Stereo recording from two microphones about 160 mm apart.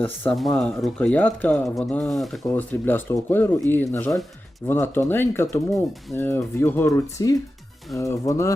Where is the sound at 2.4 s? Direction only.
10° left (ahead or behind).